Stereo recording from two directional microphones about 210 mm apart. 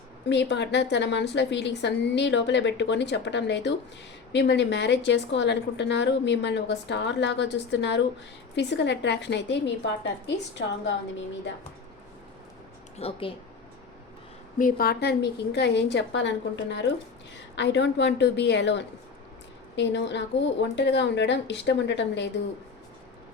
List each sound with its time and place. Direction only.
0.3 s a woman's voice: 55° left (ahead or behind)
13.0 s speech: 25° left (ahead or behind)
14.6 s a woman's voice: 45° left (ahead or behind)